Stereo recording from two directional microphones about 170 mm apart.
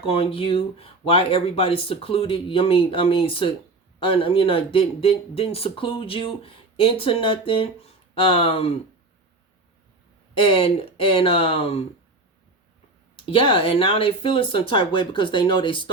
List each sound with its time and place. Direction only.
0.1 s speech: 35° left (ahead or behind)
10.3 s speech: 30° left (ahead or behind)
13.3 s speech: 30° left (ahead or behind)